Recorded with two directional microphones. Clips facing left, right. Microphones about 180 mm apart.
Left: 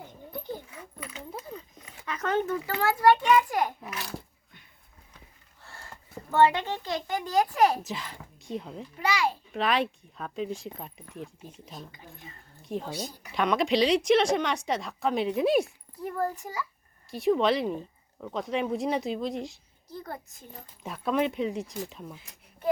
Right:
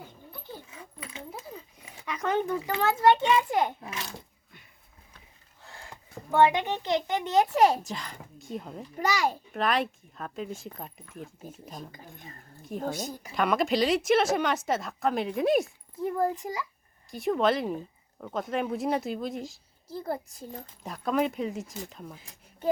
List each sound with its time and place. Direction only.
0.3 s a sound: 15° left (ahead or behind)
0.7 s a sound: 25° right (ahead or behind)
1.8 s a child's voice: 10° right (ahead or behind)
5.6 s a child's voice: 15° right (ahead or behind)
7.9 s speech: centre (ahead or behind)
9.0 s a child's voice: 45° right (ahead or behind)
9.5 s speech: centre (ahead or behind)
11.7 s a sound: 45° right (ahead or behind)
12.8 s a child's voice: 50° right (ahead or behind)
13.3 s speech: centre (ahead or behind)
16.0 s a child's voice: 15° right (ahead or behind)
17.1 s speech: centre (ahead or behind)
19.9 s a child's voice: 30° right (ahead or behind)
20.8 s speech: centre (ahead or behind)